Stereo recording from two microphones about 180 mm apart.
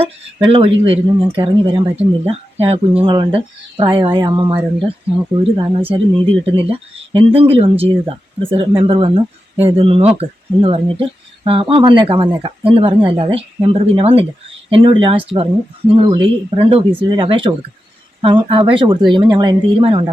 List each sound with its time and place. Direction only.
0.0 s speech: 30° right (ahead or behind)